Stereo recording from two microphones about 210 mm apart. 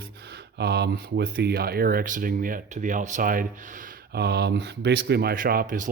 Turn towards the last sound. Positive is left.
turn(degrees=-45)  # may be behind; listen again after turning